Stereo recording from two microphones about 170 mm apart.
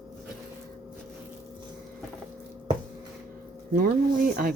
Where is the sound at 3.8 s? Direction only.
60° right (ahead or behind).